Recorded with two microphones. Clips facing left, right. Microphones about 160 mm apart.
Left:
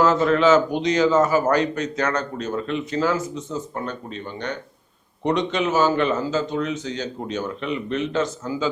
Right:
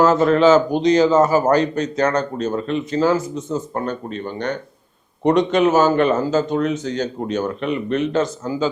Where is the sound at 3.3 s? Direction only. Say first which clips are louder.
Right 5 dB; 45° right (ahead or behind).